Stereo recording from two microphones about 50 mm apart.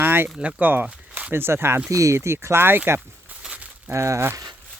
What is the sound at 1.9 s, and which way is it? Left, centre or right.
Speech, right.